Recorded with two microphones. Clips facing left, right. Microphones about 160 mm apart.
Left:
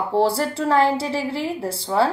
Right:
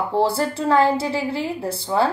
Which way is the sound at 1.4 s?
30° left (ahead or behind).